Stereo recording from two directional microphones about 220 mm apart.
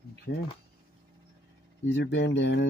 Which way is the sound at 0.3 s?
50° left (ahead or behind).